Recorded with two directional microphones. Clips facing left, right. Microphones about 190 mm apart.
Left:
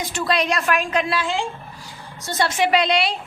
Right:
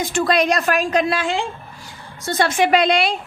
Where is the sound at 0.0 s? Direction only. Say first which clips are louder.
Right 4 dB; 50° right (ahead or behind).